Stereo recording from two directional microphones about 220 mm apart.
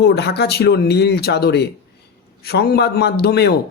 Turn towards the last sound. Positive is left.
turn(degrees=50)  # may be behind; listen again after turning